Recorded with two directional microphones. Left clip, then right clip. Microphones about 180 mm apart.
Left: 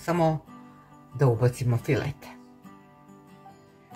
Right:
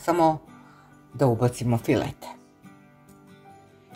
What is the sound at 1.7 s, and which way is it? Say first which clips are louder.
Speech: right 4 dB; 35° right (ahead or behind).